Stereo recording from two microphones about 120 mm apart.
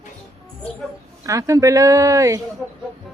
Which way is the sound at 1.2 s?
25° right (ahead or behind).